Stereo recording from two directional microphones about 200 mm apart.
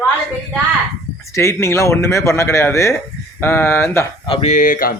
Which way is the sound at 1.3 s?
15° left (ahead or behind).